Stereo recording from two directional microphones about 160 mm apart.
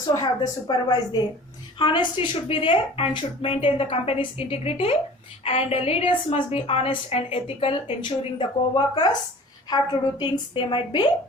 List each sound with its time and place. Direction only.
0.0 s a woman's voice: 20° left (ahead or behind)